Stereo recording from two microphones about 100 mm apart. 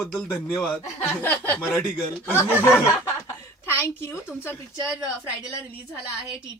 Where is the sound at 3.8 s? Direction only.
25° left (ahead or behind).